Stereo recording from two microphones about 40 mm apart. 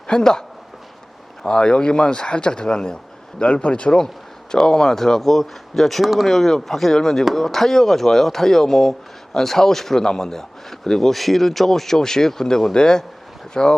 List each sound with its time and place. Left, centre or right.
0.1 s speech: centre
1.5 s speech: left